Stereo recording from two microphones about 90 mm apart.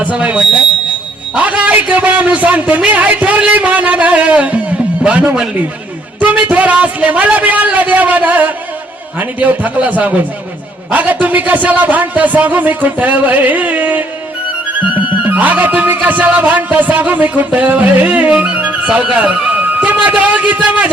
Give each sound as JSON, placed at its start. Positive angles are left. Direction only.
{"t": 0.0, "sound": "a man's voice", "side_deg": -15}
{"t": 14.8, "sound": "music", "side_deg": -15}